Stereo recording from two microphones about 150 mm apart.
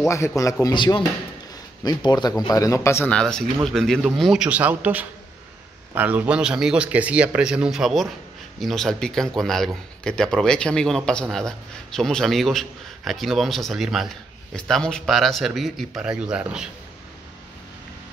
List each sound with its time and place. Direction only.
0.4 s speech: 20° left (ahead or behind)
3.1 s speech: 5° left (ahead or behind)